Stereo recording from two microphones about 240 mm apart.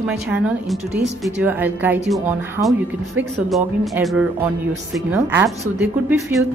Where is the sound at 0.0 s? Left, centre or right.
Centre.